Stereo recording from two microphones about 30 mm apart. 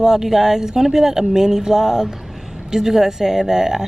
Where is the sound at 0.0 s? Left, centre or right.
Centre.